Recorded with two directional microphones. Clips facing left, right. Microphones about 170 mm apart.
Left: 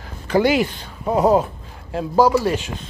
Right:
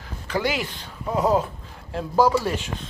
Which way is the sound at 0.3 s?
55° left (ahead or behind).